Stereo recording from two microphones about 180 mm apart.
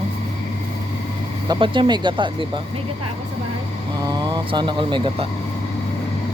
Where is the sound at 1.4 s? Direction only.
25° right (ahead or behind).